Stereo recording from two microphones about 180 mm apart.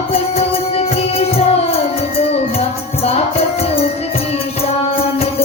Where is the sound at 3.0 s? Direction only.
35° left (ahead or behind).